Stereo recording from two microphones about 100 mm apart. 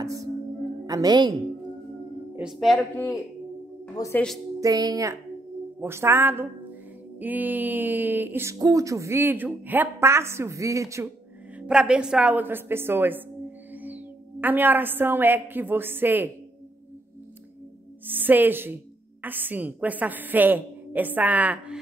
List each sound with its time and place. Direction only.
0.0 s music: 35° right (ahead or behind)
0.8 s a woman's voice: 40° right (ahead or behind)
2.5 s speech: centre (ahead or behind)
4.0 s speech: 35° left (ahead or behind)
4.6 s speech: 40° right (ahead or behind)
5.8 s a woman's voice: 25° right (ahead or behind)
8.5 s speech: 35° right (ahead or behind)
11.5 s a woman's voice: 10° right (ahead or behind)
18.0 s a woman's voice: 20° right (ahead or behind)